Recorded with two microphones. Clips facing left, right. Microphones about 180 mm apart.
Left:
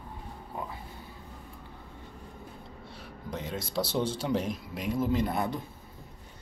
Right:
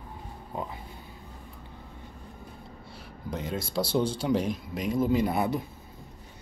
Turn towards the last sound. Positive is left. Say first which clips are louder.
# right 3 dB
turn(degrees=-5)  # may be behind; listen again after turning